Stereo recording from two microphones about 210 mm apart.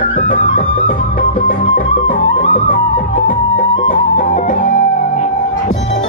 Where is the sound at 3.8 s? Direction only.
35° left (ahead or behind).